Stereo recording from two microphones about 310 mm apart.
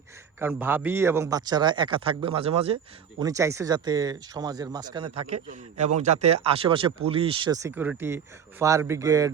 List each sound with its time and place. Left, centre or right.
0.3 s a man's voice: centre